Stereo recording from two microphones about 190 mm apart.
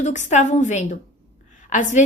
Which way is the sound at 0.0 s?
40° left (ahead or behind).